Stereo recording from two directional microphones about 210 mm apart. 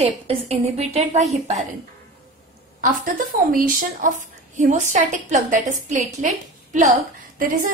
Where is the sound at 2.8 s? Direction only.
40° right (ahead or behind).